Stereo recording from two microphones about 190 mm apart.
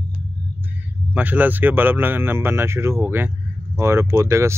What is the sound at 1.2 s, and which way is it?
Speech, 10° right (ahead or behind).